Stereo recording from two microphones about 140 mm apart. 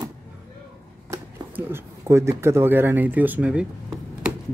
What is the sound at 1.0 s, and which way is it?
Speech, 15° right (ahead or behind).